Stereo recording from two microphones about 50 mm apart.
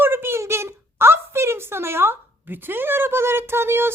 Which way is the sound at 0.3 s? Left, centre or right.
Right.